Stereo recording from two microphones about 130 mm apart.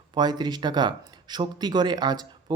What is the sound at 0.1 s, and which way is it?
Speech, 35° right (ahead or behind).